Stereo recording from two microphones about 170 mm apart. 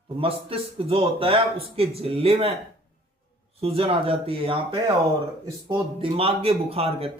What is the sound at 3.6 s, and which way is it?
A man's voice, 35° right (ahead or behind).